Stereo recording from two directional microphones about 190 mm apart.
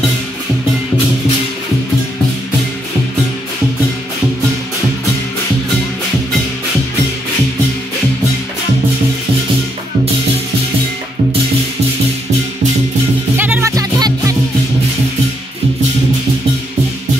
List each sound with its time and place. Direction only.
13.4 s music: 10° right (ahead or behind)